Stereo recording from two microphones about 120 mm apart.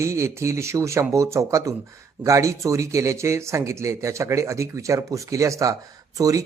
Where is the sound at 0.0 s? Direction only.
25° right (ahead or behind).